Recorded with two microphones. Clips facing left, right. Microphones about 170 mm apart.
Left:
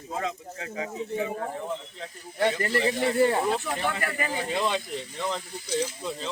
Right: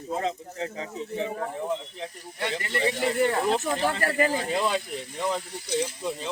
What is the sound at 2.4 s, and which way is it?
Speech, 40° left (ahead or behind).